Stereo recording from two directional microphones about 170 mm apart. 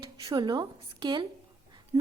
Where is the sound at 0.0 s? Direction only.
25° right (ahead or behind).